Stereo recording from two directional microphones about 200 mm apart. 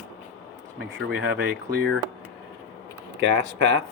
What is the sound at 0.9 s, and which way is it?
Speech, 65° right (ahead or behind).